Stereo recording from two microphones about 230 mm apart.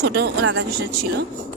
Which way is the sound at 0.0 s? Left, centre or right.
Right.